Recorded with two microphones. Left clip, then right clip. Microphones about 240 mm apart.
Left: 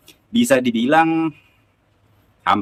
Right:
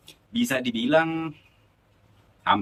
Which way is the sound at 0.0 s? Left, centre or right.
Centre.